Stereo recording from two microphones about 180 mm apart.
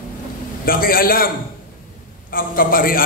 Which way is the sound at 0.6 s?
55° left (ahead or behind).